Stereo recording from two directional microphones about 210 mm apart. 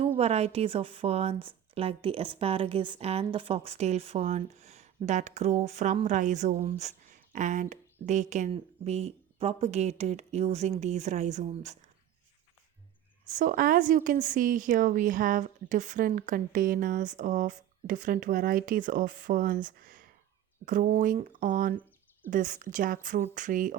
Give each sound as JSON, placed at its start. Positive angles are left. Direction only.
{"t": 0.2, "sound": "a woman's voice", "side_deg": -30}
{"t": 13.2, "sound": "a woman's voice", "side_deg": -40}